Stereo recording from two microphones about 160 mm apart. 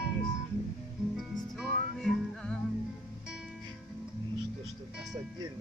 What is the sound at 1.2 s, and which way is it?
Music, 5° right (ahead or behind).